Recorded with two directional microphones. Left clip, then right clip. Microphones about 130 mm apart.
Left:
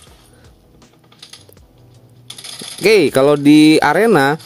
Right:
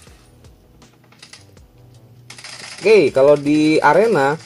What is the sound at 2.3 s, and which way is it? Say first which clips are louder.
Mechanisms: left 3 dB; 40° left (ahead or behind).